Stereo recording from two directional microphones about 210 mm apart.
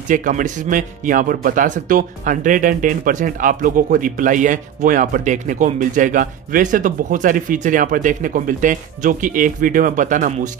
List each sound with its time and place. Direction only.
0.1 s speech: 40° right (ahead or behind)